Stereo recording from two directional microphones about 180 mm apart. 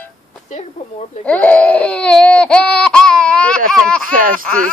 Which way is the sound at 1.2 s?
10° left (ahead or behind).